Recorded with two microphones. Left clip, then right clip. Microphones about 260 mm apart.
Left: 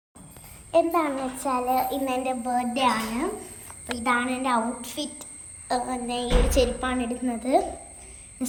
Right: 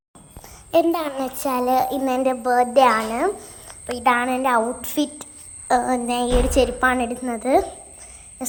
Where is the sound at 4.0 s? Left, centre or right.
Centre.